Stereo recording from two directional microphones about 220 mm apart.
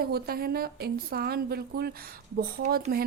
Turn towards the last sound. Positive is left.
turn(degrees=-45)  # may be behind; listen again after turning